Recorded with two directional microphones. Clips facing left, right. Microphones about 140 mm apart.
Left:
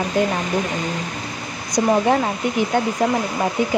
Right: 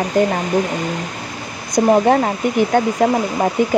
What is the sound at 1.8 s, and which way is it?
Speech, 45° right (ahead or behind).